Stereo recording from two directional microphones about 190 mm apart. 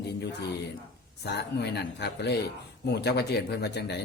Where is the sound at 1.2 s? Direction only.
60° left (ahead or behind).